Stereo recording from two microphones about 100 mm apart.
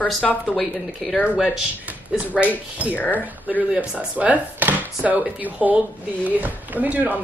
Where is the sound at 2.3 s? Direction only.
15° right (ahead or behind).